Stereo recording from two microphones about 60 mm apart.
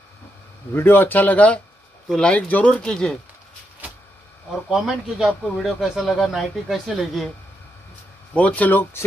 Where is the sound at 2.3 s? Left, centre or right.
Left; by 3.2 s centre.